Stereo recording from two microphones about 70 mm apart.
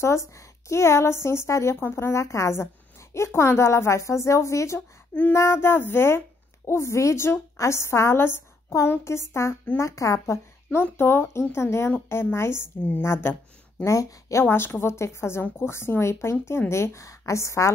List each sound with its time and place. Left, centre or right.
0.4 s a woman's voice: left
10.8 s speech: left
13.8 s speech: left
14.4 s speech: left